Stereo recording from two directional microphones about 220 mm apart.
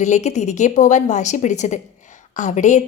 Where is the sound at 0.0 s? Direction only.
30° left (ahead or behind).